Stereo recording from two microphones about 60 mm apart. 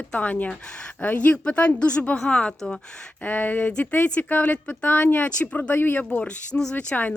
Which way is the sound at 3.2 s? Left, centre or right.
Left.